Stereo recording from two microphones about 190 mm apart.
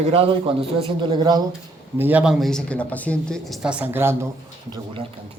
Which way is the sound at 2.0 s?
10° right (ahead or behind).